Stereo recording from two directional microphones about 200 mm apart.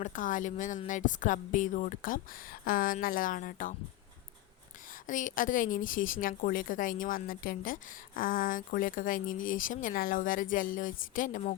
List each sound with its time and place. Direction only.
0.0 s a woman's voice: 40° left (ahead or behind)
5.0 s a woman's voice: 40° left (ahead or behind)